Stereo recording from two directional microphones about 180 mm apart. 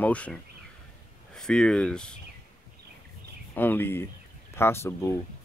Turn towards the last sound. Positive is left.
turn(degrees=15)  # may be behind; listen again after turning